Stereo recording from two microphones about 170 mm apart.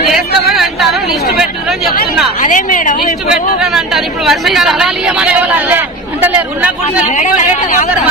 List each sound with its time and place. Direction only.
0.1 s a sound: centre (ahead or behind)
2.4 s a woman's voice: 50° left (ahead or behind)
3.3 s speech: 5° right (ahead or behind)